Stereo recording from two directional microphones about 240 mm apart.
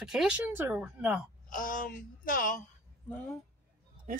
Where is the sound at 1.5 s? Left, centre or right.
Left.